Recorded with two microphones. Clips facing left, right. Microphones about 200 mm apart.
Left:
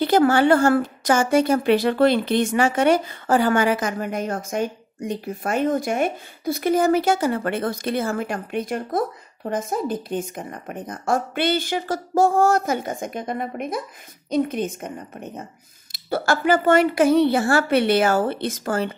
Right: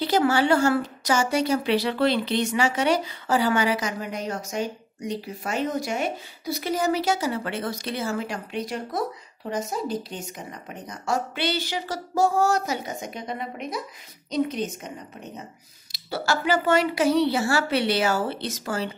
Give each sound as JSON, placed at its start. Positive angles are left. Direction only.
{"t": 0.0, "sound": "a woman's voice", "side_deg": 55}